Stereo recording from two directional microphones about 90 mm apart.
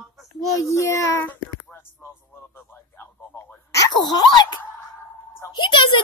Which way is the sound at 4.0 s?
50° left (ahead or behind).